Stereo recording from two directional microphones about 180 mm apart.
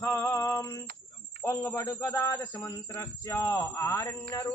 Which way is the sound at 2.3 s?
25° left (ahead or behind).